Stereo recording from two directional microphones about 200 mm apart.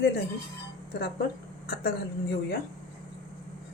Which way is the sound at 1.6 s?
50° left (ahead or behind).